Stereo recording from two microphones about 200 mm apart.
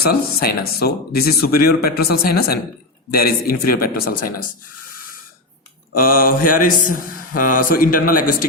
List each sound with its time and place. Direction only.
0.0 s mantra: 50° left (ahead or behind)
5.9 s mantra: 45° left (ahead or behind)